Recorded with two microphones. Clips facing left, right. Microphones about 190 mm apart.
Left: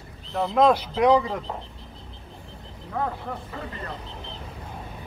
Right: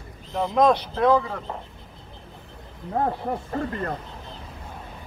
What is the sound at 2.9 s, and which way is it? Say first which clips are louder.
Speech: right 4 dB; 40° right (ahead or behind).